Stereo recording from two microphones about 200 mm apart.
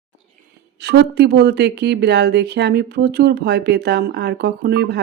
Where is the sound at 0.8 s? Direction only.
60° right (ahead or behind).